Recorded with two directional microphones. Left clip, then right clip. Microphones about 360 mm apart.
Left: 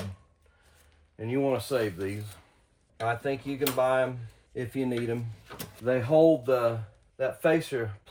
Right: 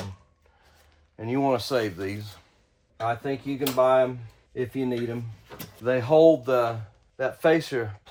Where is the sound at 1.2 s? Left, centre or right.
Centre.